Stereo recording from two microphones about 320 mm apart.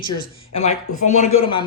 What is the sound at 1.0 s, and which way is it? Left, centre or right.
Speech, left.